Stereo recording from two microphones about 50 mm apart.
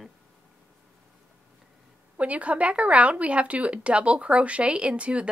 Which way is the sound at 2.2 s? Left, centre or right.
Right.